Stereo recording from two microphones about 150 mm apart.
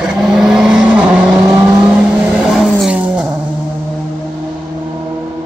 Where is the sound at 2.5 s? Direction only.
Centre (ahead or behind).